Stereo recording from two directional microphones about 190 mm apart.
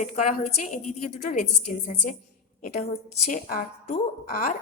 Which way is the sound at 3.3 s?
45° left (ahead or behind).